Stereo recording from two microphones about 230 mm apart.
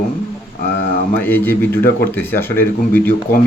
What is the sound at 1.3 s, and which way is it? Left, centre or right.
Speech, centre.